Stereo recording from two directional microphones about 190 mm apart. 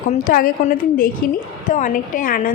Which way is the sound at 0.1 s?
45° left (ahead or behind).